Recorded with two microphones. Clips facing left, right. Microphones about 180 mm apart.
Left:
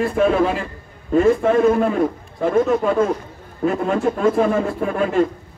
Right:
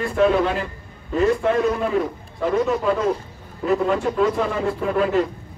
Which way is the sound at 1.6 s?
50° left (ahead or behind).